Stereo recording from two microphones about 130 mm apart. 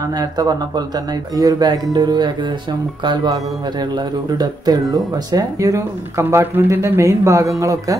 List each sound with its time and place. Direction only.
0.0 s speech: 30° right (ahead or behind)